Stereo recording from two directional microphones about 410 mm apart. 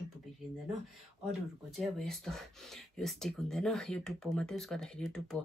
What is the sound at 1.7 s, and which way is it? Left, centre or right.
Speech, centre.